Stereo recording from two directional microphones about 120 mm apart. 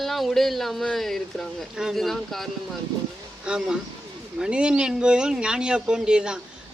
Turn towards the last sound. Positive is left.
turn(degrees=-5)  # may be behind; listen again after turning